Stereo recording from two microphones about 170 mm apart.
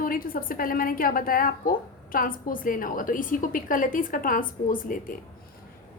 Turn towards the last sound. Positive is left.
turn(degrees=55)  # may be behind; listen again after turning